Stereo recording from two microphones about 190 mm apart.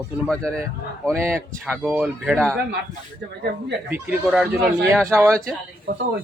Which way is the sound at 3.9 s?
10° right (ahead or behind).